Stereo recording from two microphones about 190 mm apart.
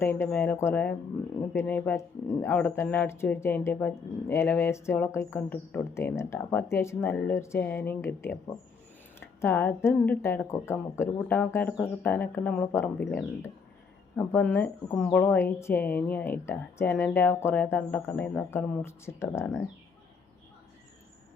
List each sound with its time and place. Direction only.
0.0 s speech: 10° left (ahead or behind)